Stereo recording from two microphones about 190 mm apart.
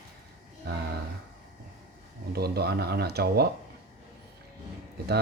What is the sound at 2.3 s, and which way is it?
Speech, 55° right (ahead or behind).